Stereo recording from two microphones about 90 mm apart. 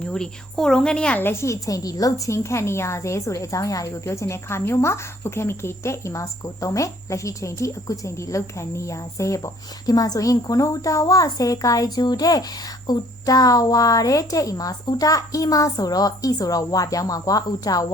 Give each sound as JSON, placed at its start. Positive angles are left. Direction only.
{"t": 0.0, "sound": "speech", "side_deg": 5}
{"t": 1.2, "sound": "a woman's voice", "side_deg": 30}